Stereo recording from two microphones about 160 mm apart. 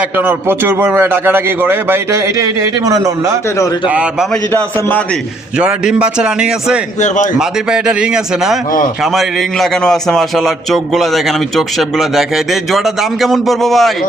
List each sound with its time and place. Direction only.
0.2 s a man's voice: 15° right (ahead or behind)
3.8 s a man's voice: 5° right (ahead or behind)
5.5 s a man's voice: 5° right (ahead or behind)